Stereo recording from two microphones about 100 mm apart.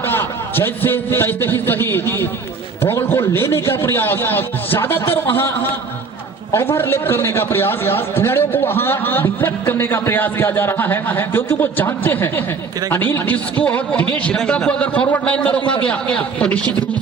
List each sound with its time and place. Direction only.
0.0 s a man's voice: 20° left (ahead or behind)
6.5 s a man's voice: 25° left (ahead or behind)